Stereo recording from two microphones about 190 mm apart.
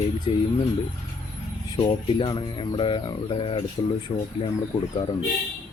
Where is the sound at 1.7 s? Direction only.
25° left (ahead or behind).